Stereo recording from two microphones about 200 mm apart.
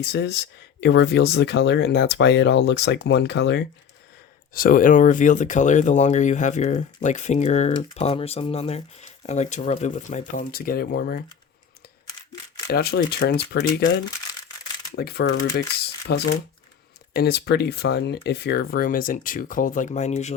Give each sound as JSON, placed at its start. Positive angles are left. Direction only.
{"t": 0.0, "sound": "speech", "side_deg": 55}
{"t": 4.5, "sound": "speech", "side_deg": 45}
{"t": 12.7, "sound": "speech", "side_deg": 55}
{"t": 14.9, "sound": "speech", "side_deg": 55}
{"t": 16.0, "sound": "speech", "side_deg": 55}